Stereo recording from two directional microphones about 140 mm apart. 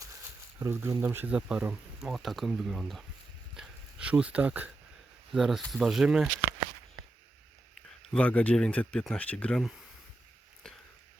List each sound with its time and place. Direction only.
0.6 s speech: 20° right (ahead or behind); by 3.0 s centre (ahead or behind)
3.5 s dog: 5° right (ahead or behind)
5.3 s speech: centre (ahead or behind)
8.1 s speech: 10° left (ahead or behind)